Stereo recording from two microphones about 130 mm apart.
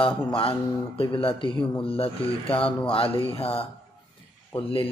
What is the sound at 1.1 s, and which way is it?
Speech, 40° left (ahead or behind).